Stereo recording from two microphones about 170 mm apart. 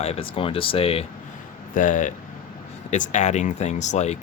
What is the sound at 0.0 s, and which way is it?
Speech, 35° left (ahead or behind).